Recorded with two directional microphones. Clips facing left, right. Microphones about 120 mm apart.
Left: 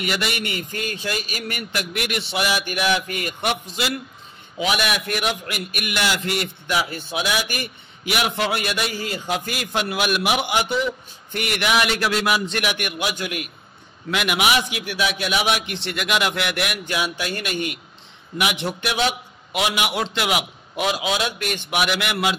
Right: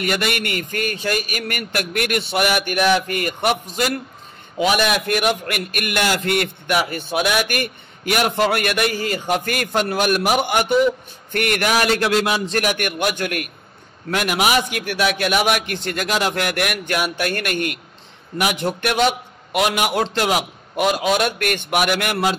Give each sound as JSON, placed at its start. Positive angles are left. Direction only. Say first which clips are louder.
{"t": 0.0, "sound": "a man's voice", "louder": "right 3 dB", "side_deg": -50}
{"t": 5.0, "sound": "a man's voice", "louder": "right 5 dB", "side_deg": -55}
{"t": 14.1, "sound": "a man's voice", "louder": "right 2 dB", "side_deg": -40}
{"t": 18.4, "sound": "a man's voice", "louder": "right 3 dB", "side_deg": -45}